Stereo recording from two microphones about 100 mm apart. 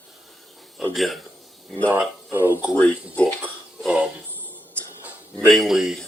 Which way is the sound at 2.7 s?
15° left (ahead or behind).